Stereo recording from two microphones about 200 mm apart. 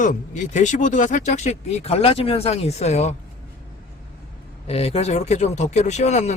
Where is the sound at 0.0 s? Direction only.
40° left (ahead or behind).